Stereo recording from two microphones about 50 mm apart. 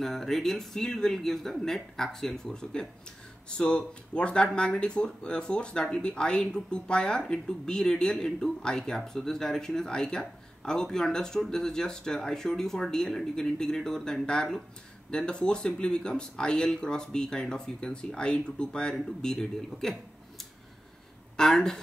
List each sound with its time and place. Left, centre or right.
0.0 s speech: centre